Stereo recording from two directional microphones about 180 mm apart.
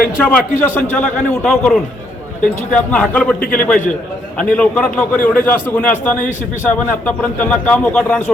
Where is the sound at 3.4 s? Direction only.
50° left (ahead or behind).